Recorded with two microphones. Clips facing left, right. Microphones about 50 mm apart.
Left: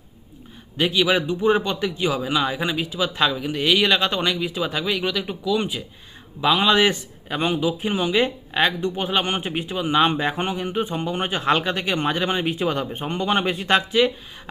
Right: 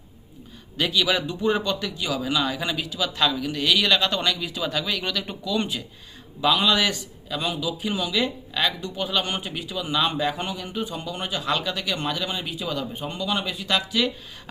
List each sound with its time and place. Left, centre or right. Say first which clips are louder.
0.8 s speech: left 3 dB; left
6.4 s a man's voice: left 3 dB; left